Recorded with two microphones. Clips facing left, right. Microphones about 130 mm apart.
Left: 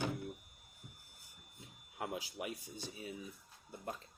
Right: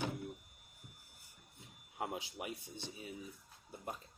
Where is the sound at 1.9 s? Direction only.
25° right (ahead or behind).